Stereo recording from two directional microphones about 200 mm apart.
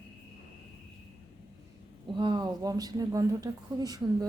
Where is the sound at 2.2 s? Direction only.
20° right (ahead or behind).